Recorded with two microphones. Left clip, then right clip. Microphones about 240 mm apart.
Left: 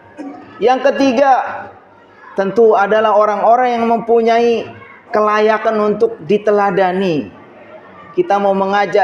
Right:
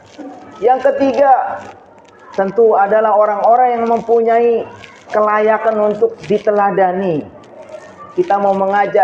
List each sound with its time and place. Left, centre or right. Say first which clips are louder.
0.6 s a man's voice: even; left
2.4 s a man's voice: even; left
8.3 s a man's voice: even; left